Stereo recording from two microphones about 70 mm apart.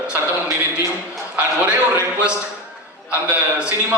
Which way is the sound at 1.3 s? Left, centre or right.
Centre.